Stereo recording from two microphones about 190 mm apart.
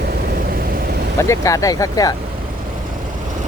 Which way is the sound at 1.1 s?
15° left (ahead or behind).